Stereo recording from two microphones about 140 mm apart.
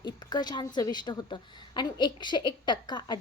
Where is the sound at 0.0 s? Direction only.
30° left (ahead or behind).